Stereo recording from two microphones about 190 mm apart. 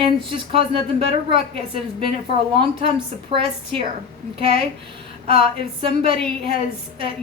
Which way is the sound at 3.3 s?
30° right (ahead or behind).